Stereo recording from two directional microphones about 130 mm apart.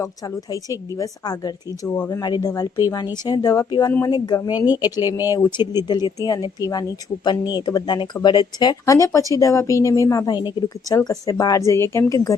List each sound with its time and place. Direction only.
0.5 s a woman's voice: 25° left (ahead or behind)